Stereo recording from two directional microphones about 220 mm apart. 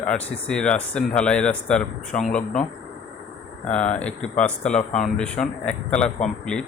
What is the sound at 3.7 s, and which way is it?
Speech, 5° left (ahead or behind).